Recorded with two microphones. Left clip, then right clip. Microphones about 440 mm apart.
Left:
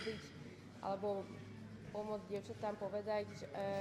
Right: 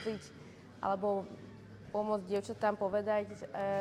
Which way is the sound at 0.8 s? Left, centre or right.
Right.